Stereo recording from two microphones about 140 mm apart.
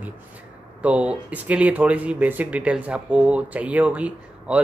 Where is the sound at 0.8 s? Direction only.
10° right (ahead or behind).